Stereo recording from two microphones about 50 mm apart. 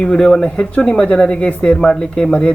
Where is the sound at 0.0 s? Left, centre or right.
Centre.